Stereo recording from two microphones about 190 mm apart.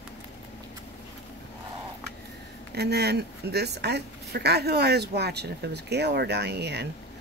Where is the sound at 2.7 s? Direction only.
60° right (ahead or behind).